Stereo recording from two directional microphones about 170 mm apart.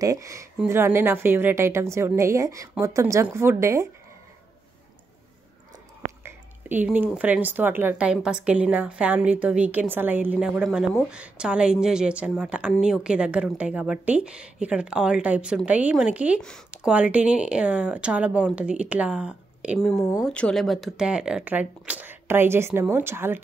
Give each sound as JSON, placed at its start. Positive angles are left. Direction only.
{"t": 0.0, "sound": "speech", "side_deg": -20}
{"t": 6.0, "sound": "speech", "side_deg": -10}
{"t": 16.3, "sound": "speech", "side_deg": 5}
{"t": 16.7, "sound": "speech", "side_deg": -5}
{"t": 20.2, "sound": "speech", "side_deg": 5}